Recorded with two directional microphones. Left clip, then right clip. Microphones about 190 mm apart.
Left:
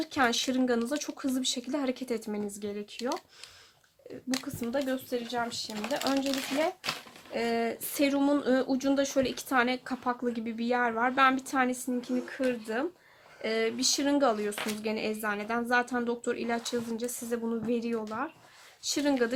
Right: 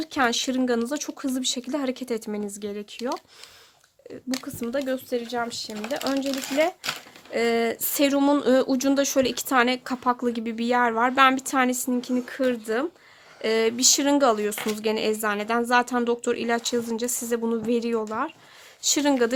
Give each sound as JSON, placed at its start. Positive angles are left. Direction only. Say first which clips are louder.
{"t": 0.0, "sound": "speech", "louder": "right 4 dB", "side_deg": -45}
{"t": 4.4, "sound": "speech", "louder": "right 5 dB", "side_deg": -45}
{"t": 6.1, "sound": "speech", "louder": "right 6 dB", "side_deg": -30}
{"t": 7.3, "sound": "speech", "louder": "right 7 dB", "side_deg": -50}